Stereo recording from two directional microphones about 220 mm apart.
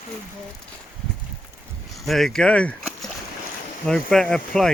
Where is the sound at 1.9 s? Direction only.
Centre (ahead or behind).